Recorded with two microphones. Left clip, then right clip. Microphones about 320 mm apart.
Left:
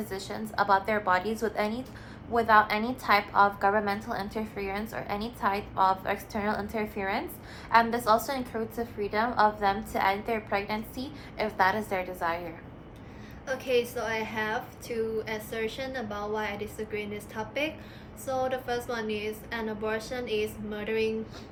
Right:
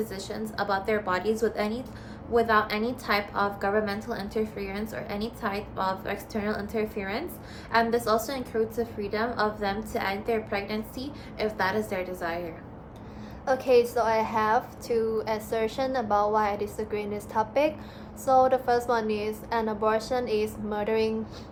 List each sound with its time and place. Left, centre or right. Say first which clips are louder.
0.1 s a woman's voice: right 1 dB; centre
13.4 s a woman's voice: right 6 dB; centre